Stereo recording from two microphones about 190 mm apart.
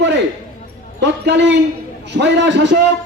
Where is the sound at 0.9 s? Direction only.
65° right (ahead or behind).